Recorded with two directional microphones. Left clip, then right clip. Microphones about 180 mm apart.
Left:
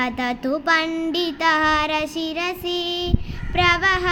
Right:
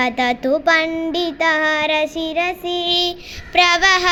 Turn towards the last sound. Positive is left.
turn(degrees=-5)  # may be behind; listen again after turning